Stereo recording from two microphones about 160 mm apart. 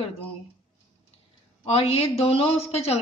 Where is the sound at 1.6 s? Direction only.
40° left (ahead or behind).